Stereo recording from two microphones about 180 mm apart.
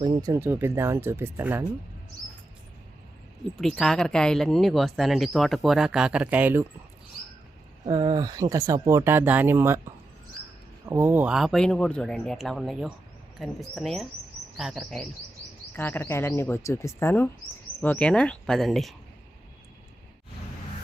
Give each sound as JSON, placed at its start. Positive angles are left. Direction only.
{"t": 0.0, "sound": "speech", "side_deg": -20}
{"t": 3.6, "sound": "speech", "side_deg": 0}
{"t": 7.9, "sound": "speech", "side_deg": -25}
{"t": 10.8, "sound": "speech", "side_deg": -10}
{"t": 15.7, "sound": "speech", "side_deg": 10}